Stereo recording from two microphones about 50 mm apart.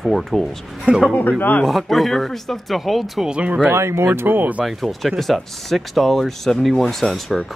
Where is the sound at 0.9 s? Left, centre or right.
Right.